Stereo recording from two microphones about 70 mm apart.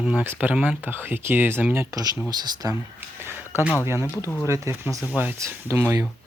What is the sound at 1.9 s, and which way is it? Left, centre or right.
Speech, right.